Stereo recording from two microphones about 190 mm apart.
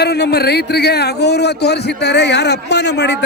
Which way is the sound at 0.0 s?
60° left (ahead or behind).